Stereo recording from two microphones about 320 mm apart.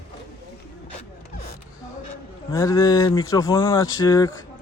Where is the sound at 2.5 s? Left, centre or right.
Centre.